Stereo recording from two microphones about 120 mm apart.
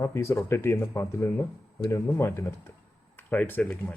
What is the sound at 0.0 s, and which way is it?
Speech, 20° left (ahead or behind).